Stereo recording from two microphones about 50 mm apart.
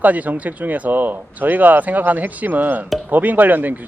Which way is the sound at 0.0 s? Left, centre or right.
Right.